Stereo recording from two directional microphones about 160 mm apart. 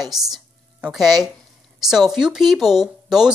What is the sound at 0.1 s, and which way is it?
A woman's voice, centre (ahead or behind).